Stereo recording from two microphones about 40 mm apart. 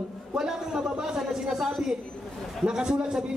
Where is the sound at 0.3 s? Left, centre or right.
Centre.